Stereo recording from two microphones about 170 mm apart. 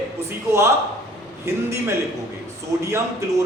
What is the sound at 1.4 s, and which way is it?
A man's voice, 15° right (ahead or behind).